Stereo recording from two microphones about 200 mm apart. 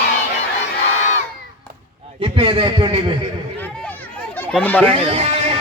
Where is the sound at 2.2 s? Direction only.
25° right (ahead or behind).